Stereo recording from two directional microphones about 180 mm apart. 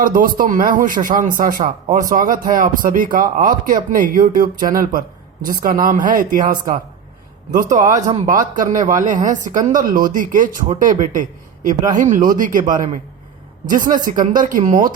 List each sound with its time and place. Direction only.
0.0 s speech: 50° right (ahead or behind)
14.0 s speech: 45° right (ahead or behind)